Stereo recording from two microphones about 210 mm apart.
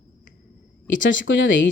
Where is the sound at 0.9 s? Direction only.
60° left (ahead or behind).